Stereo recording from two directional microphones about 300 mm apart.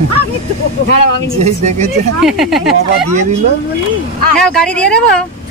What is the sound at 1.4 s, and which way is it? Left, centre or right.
Speech, right.